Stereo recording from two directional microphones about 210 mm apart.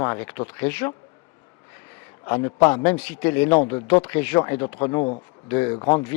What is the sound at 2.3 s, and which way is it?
Speech, 20° left (ahead or behind).